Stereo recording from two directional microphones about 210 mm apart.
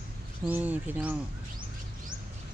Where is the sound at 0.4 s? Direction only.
5° right (ahead or behind).